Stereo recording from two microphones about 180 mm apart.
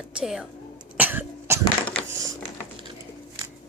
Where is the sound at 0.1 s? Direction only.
5° right (ahead or behind).